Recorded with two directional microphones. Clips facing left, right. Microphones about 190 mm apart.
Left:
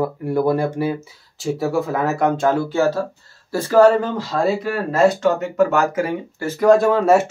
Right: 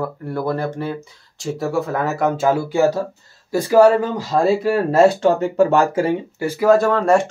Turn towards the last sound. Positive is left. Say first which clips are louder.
# left 1 dB
turn(degrees=5)  # may be behind; listen again after turning